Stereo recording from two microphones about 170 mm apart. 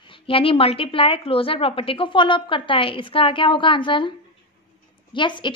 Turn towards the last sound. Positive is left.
turn(degrees=30)  # may be behind; listen again after turning